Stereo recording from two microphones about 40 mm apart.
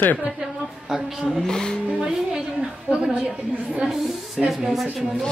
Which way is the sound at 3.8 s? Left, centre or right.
Centre.